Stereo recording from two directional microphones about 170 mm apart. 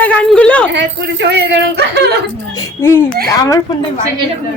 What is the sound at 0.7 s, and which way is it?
Speech, 85° right.